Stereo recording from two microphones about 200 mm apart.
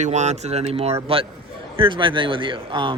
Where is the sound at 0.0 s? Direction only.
35° right (ahead or behind).